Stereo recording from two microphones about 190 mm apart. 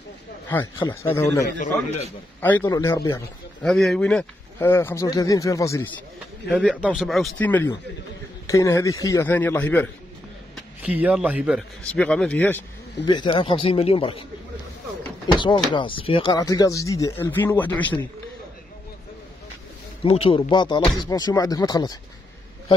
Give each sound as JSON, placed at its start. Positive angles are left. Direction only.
{"t": 1.0, "sound": "speech", "side_deg": 15}
{"t": 1.6, "sound": "a man's voice", "side_deg": 35}
{"t": 2.4, "sound": "speech", "side_deg": 10}
{"t": 3.6, "sound": "speech", "side_deg": 0}
{"t": 6.5, "sound": "speech", "side_deg": -5}
{"t": 10.5, "sound": "a man's voice", "side_deg": -5}
{"t": 11.8, "sound": "speech", "side_deg": 5}
{"t": 13.0, "sound": "speech", "side_deg": 25}
{"t": 15.3, "sound": "speech", "side_deg": 25}
{"t": 20.0, "sound": "speech", "side_deg": 30}